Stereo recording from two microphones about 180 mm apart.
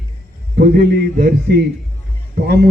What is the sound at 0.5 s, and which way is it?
A man's voice, 60° right (ahead or behind).